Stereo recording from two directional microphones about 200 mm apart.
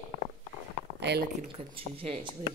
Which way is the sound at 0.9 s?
55° right (ahead or behind).